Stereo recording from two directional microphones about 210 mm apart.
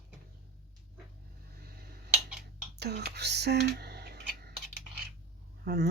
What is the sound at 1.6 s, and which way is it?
Tick-tock, 45° right (ahead or behind).